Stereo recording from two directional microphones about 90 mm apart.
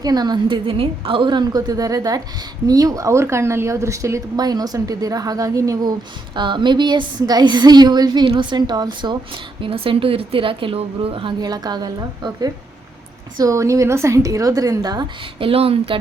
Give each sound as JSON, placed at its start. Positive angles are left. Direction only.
{"t": 0.0, "sound": "a woman's voice", "side_deg": -45}
{"t": 0.4, "sound": "a woman's voice", "side_deg": -80}
{"t": 4.4, "sound": "a woman's voice", "side_deg": -45}
{"t": 6.3, "sound": "a woman's voice", "side_deg": -60}
{"t": 8.3, "sound": "a woman's voice", "side_deg": -60}
{"t": 9.6, "sound": "a woman's voice", "side_deg": -85}
{"t": 11.3, "sound": "a woman's voice", "side_deg": -50}
{"t": 15.4, "sound": "speech", "side_deg": -90}